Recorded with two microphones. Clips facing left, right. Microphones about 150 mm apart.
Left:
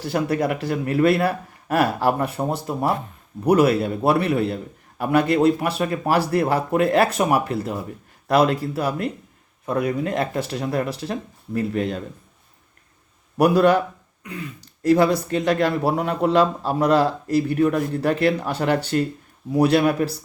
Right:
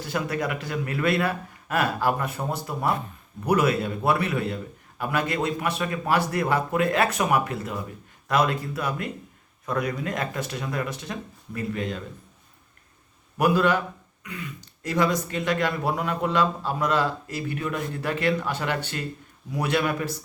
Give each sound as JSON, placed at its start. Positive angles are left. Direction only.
{"t": 0.0, "sound": "speech", "side_deg": 35}
{"t": 13.3, "sound": "speech", "side_deg": 35}